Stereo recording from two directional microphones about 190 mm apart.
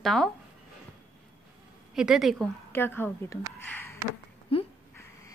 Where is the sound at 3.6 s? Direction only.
10° left (ahead or behind).